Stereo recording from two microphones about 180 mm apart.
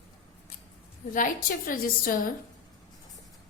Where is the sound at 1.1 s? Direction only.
45° left (ahead or behind).